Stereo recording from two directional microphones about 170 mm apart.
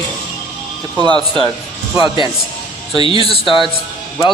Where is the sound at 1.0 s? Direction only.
25° right (ahead or behind).